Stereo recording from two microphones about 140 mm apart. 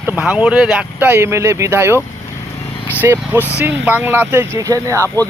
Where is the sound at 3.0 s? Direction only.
15° right (ahead or behind).